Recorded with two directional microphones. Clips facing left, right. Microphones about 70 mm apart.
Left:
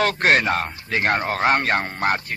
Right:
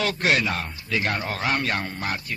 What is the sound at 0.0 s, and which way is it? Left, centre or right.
A man's voice, left.